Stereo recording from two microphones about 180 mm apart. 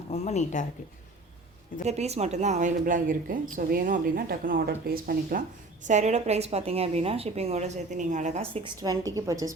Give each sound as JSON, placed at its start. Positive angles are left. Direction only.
{"t": 0.1, "sound": "speech", "side_deg": 40}
{"t": 1.8, "sound": "speech", "side_deg": -40}
{"t": 5.9, "sound": "a woman's voice", "side_deg": -40}
{"t": 8.8, "sound": "a woman's voice", "side_deg": -20}